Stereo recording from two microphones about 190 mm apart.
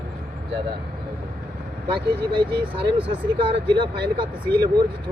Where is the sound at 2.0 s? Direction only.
25° right (ahead or behind).